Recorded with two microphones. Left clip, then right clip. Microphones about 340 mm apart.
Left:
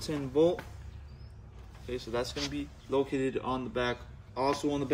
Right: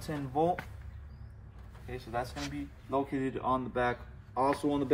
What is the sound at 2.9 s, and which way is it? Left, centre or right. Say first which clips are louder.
Speech: left 3 dB; centre.